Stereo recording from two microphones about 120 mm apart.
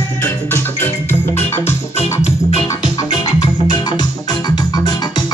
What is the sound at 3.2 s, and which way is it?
Music, 35° left (ahead or behind).